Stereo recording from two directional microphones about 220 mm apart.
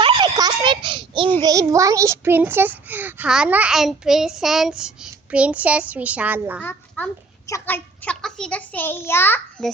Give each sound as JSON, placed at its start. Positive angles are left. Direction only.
{"t": 0.0, "sound": "a sound", "side_deg": -20}
{"t": 1.4, "sound": "a child's voice", "side_deg": -15}
{"t": 6.6, "sound": "a child's voice", "side_deg": 5}